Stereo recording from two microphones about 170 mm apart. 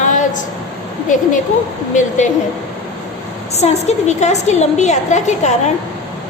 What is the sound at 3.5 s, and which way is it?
A woman's voice, 40° left (ahead or behind).